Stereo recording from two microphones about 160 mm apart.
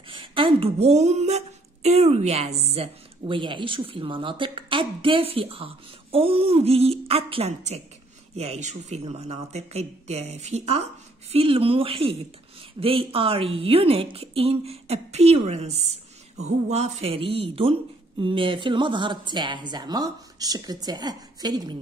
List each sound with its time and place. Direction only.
0.1 s a woman's voice: 35° right (ahead or behind)